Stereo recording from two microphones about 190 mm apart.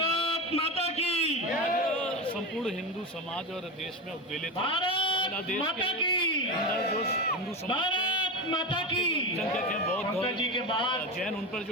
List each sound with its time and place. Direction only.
0.0 s a sound: 30° left (ahead or behind)
4.6 s sheep: 25° left (ahead or behind)
5.6 s speech: 25° left (ahead or behind)
7.7 s a man's voice: 25° left (ahead or behind)
11.2 s a man's voice: 5° left (ahead or behind)